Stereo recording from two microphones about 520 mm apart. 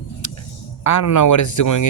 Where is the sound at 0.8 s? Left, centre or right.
Left.